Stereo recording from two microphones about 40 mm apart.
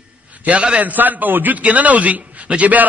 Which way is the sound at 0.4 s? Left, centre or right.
Right.